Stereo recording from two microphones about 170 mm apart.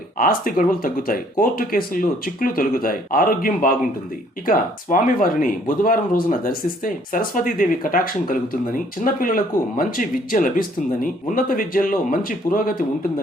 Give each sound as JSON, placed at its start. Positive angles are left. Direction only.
{"t": 0.2, "sound": "speech", "side_deg": 55}